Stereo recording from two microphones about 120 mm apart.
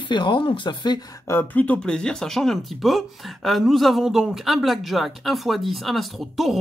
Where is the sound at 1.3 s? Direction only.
15° left (ahead or behind).